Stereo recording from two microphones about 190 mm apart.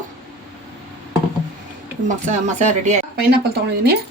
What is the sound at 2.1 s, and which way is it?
Speech, 40° right (ahead or behind).